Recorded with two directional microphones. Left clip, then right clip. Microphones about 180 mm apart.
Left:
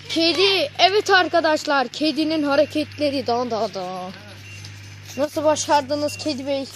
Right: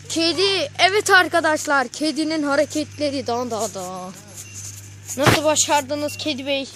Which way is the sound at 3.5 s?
5° right (ahead or behind).